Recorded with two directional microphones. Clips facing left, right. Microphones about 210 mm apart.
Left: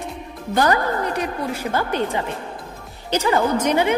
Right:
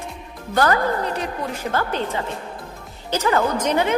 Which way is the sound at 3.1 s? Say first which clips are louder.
Left 1 dB; 15° left (ahead or behind).